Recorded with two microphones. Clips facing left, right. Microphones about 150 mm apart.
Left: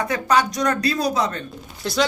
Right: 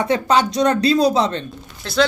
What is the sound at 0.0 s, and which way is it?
Speech, 25° right (ahead or behind).